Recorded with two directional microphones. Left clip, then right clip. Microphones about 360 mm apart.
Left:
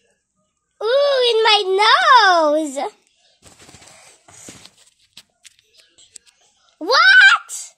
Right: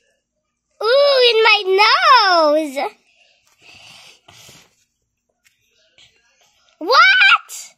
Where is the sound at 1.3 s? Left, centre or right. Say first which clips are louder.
Right 2 dB; centre.